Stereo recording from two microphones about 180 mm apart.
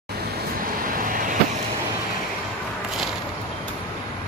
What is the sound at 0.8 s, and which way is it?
Vehicle, 50° right (ahead or behind).